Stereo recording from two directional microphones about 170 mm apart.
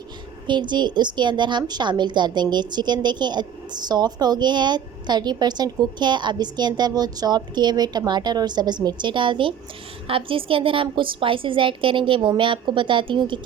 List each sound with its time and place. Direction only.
0.4 s a woman's voice: 25° right (ahead or behind)